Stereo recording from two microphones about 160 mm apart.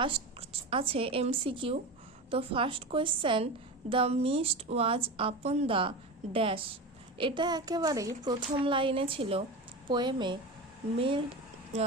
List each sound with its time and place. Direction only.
0.0 s a woman's voice: 35° right (ahead or behind)